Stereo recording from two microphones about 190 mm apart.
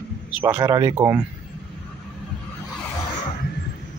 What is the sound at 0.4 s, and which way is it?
Speech, 10° right (ahead or behind).